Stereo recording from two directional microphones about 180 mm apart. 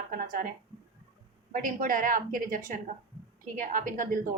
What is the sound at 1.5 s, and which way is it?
A woman's voice, 50° right (ahead or behind).